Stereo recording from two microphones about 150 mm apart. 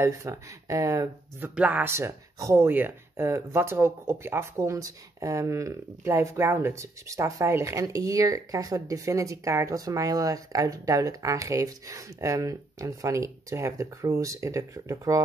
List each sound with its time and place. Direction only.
0.0 s speech: 20° right (ahead or behind)
1.5 s speech: 10° right (ahead or behind)